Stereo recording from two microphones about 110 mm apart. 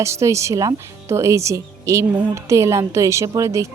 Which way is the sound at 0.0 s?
25° right (ahead or behind).